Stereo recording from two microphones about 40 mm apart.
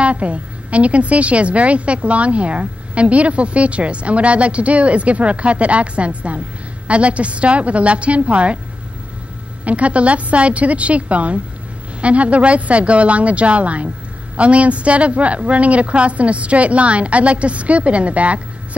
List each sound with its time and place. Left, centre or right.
0.0 s a woman's voice: right
9.7 s a woman's voice: right